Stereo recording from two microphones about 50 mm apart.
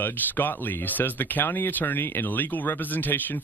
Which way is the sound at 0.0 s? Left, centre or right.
Left.